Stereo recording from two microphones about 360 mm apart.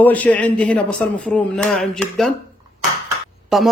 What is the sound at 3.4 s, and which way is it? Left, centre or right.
Speech, centre.